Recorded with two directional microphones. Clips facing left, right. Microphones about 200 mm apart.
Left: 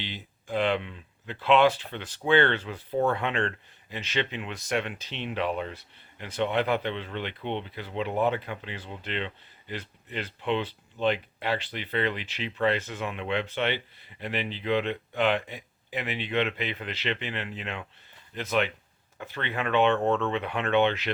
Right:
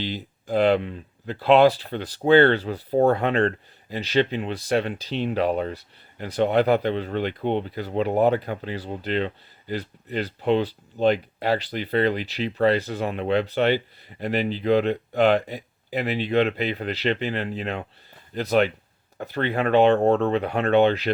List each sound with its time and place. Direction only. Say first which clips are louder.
0.0 s speech: right 9 dB; 40° right (ahead or behind)